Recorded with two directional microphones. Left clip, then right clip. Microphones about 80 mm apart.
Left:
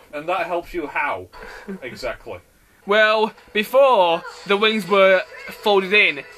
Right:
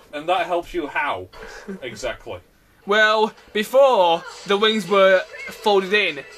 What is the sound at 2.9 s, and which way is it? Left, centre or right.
A man's voice, left.